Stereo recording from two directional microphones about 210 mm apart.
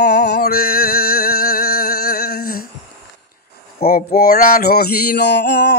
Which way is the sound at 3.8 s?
45° left (ahead or behind).